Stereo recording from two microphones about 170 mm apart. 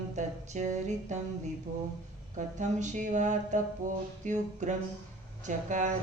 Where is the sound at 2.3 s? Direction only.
45° right (ahead or behind).